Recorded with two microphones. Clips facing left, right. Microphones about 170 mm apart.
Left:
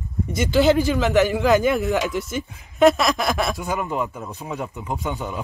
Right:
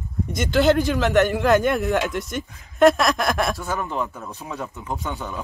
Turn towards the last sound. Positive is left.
turn(degrees=15)  # may be behind; listen again after turning